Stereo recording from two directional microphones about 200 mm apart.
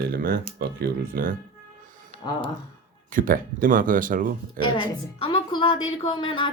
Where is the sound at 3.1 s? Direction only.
45° right (ahead or behind).